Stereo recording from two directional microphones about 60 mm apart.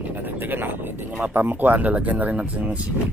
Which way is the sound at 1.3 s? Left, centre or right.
Right.